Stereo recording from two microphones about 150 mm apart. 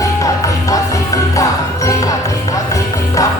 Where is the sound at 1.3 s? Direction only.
20° left (ahead or behind).